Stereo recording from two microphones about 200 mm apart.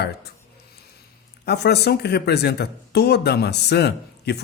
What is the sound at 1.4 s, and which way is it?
Speech, 55° left (ahead or behind).